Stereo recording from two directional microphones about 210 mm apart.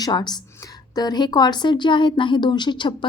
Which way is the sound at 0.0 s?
20° left (ahead or behind).